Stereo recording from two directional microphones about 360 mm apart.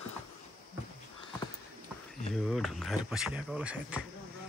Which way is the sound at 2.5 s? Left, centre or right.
Centre.